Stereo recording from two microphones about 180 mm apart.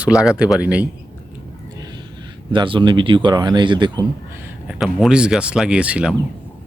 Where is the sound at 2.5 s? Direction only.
30° right (ahead or behind).